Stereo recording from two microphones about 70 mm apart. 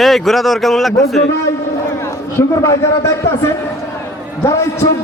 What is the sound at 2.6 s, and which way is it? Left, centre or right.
Speech, left.